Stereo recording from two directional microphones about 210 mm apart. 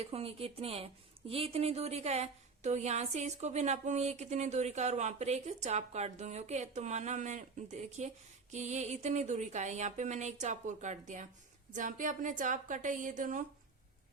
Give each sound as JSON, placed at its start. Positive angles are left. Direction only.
{"t": 0.0, "sound": "speech", "side_deg": -30}